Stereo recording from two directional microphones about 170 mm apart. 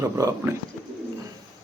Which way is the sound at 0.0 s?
20° right (ahead or behind).